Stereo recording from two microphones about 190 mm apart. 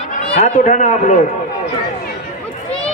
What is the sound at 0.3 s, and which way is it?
Speech, 40° left (ahead or behind).